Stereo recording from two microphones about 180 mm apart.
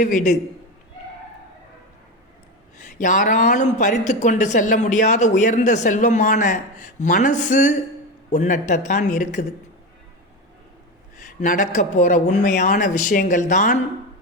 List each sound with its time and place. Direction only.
0.0 s speech: 45° left (ahead or behind)
2.7 s speech: 45° left (ahead or behind)
11.2 s speech: 45° left (ahead or behind)